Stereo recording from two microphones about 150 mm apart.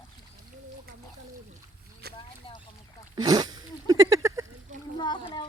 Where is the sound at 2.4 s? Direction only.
40° left (ahead or behind).